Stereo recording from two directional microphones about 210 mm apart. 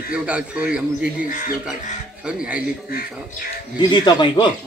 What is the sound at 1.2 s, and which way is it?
Speech, 40° left (ahead or behind).